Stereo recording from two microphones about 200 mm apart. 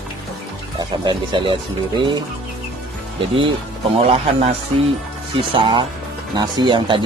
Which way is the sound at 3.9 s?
30° right (ahead or behind).